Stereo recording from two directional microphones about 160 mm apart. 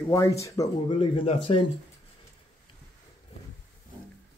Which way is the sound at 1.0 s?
35° left (ahead or behind).